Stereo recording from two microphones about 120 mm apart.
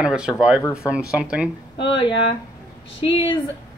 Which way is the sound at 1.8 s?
40° left (ahead or behind).